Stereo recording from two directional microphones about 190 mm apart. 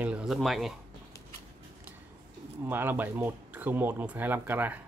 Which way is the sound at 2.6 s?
10° right (ahead or behind).